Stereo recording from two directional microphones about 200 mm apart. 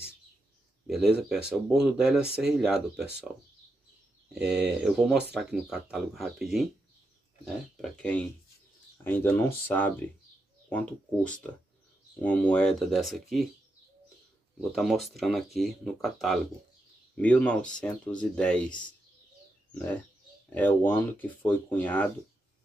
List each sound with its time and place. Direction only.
0.8 s speech: centre (ahead or behind)
12.2 s speech: 5° left (ahead or behind)
14.6 s speech: centre (ahead or behind)
19.7 s speech: 10° left (ahead or behind)